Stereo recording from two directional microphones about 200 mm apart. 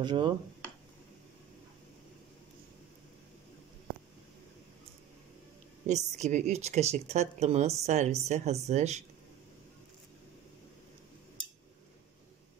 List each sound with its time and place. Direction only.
0.0 s speech: 20° right (ahead or behind)
5.9 s speech: 35° right (ahead or behind)